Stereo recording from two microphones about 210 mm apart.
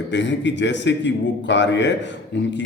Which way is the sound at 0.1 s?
60° left (ahead or behind).